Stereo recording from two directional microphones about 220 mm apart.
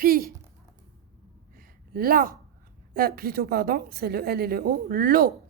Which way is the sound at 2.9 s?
45° right (ahead or behind).